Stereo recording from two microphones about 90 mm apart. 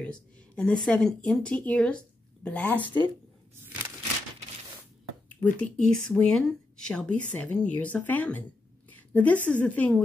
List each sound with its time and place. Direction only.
0.0 s speech: 10° left (ahead or behind)
2.8 s speech: 60° right (ahead or behind)
3.5 s a sound: 25° right (ahead or behind)
5.4 s a woman's voice: 10° left (ahead or behind)